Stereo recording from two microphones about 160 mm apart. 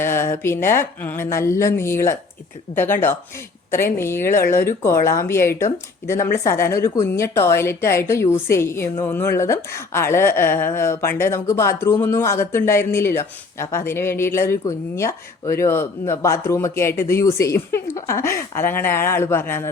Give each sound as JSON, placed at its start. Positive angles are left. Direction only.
{"t": 0.0, "sound": "a woman's voice", "side_deg": 15}